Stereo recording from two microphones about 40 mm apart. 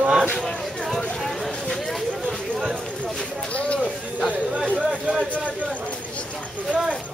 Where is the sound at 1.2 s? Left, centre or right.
Centre.